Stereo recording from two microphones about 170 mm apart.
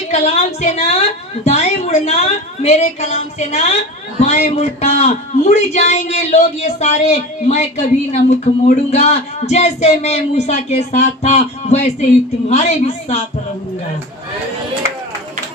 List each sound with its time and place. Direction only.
0.1 s a man's voice: 40° left (ahead or behind)